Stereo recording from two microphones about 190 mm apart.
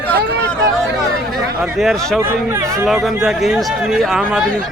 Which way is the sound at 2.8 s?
Centre (ahead or behind).